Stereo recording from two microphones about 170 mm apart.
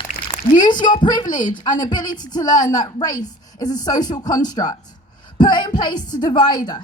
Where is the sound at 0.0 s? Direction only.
25° left (ahead or behind).